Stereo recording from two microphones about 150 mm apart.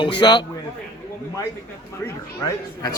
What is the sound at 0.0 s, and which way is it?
Speech, 30° left (ahead or behind).